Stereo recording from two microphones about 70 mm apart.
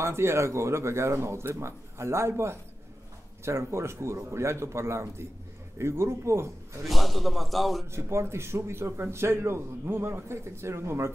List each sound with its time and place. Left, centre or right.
0.0 s a man's voice: right
6.9 s speech: centre
7.9 s a man's voice: right